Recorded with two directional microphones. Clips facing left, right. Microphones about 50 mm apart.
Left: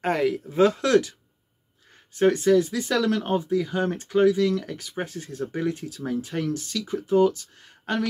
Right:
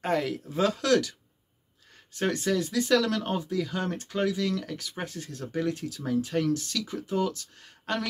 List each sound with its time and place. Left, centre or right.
0.5 s speech: left
2.1 s speech: centre
7.6 s a sound: centre